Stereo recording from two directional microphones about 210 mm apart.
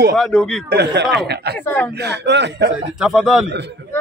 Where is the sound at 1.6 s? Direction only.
10° left (ahead or behind).